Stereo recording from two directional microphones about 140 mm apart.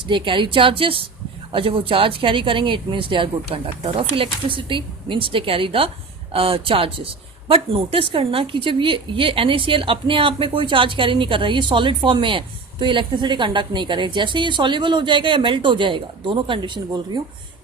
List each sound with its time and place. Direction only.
0.1 s speech: 35° right (ahead or behind)